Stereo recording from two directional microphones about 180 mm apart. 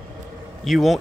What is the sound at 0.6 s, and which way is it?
Speech, centre (ahead or behind).